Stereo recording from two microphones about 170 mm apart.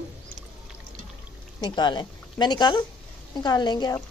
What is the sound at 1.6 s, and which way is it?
Speech, 25° left (ahead or behind).